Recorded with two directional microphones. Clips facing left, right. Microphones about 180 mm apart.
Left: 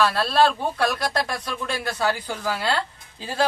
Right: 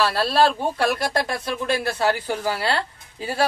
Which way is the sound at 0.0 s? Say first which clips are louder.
Even; 30° right (ahead or behind).